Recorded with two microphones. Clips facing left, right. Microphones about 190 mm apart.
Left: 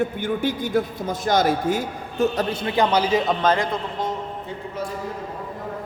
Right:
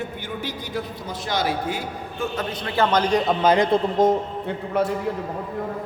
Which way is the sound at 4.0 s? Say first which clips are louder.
Right 10 dB; 45° right (ahead or behind).